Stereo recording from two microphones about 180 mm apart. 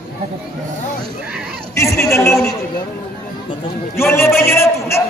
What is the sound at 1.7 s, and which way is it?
Speech, 15° left (ahead or behind).